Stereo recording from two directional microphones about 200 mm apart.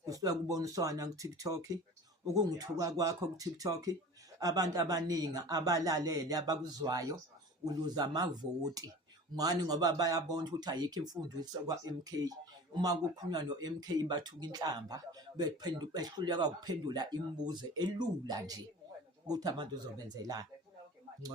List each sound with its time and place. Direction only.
0.0 s speech: 20° right (ahead or behind)
9.3 s speech: 20° right (ahead or behind)